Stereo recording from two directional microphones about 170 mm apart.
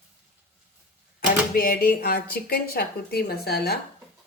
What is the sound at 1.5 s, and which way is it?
Speech, 60° left (ahead or behind).